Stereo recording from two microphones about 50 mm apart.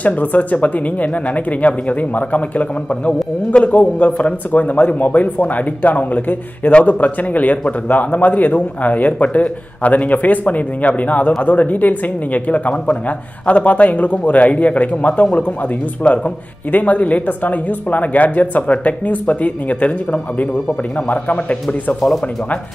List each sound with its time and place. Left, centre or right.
0.0 s a man's voice: left